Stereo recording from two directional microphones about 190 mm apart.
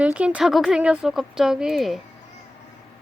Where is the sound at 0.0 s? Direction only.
5° right (ahead or behind).